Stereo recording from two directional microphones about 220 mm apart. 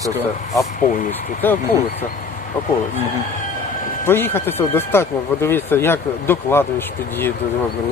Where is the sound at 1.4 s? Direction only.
10° left (ahead or behind).